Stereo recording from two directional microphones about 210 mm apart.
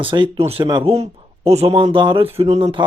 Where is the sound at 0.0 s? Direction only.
25° right (ahead or behind).